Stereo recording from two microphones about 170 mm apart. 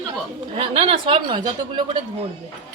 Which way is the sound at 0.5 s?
35° right (ahead or behind).